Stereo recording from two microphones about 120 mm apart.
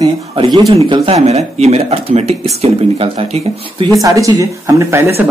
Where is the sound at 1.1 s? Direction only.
65° right (ahead or behind).